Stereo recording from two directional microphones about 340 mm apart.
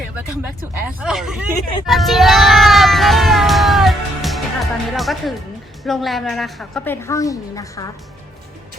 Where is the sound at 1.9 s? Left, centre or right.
Centre.